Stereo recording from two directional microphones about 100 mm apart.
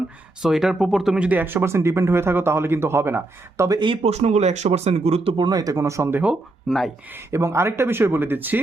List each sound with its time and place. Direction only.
0.4 s speech: 5° right (ahead or behind)
1.5 s speech: 25° right (ahead or behind)
4.0 s speech: 90° right
5.4 s speech: 40° right (ahead or behind); by 6.3 s 20° right (ahead or behind)
6.7 s speech: centre (ahead or behind)
7.1 s speech: 25° right (ahead or behind)